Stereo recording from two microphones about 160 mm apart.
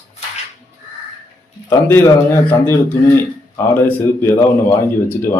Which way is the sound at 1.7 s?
15° left (ahead or behind).